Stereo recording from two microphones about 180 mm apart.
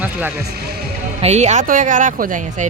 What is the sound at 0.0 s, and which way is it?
Speech, 10° right (ahead or behind).